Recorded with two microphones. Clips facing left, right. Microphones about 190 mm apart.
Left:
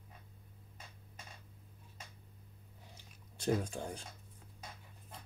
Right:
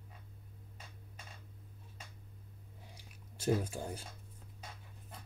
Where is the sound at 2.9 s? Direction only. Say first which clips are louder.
Right 2 dB; 5° right (ahead or behind).